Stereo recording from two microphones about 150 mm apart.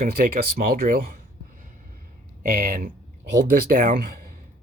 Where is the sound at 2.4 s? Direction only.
70° right (ahead or behind).